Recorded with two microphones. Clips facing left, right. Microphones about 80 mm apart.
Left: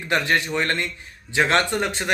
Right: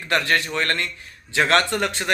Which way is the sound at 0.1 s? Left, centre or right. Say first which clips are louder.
Even; centre.